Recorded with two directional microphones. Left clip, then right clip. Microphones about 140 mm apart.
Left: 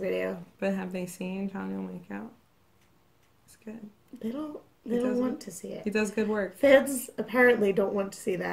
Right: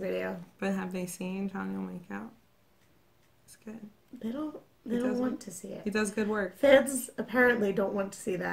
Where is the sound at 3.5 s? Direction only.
10° right (ahead or behind).